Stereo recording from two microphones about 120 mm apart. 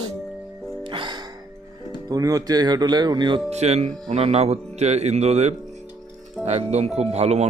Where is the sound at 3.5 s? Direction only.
65° right (ahead or behind).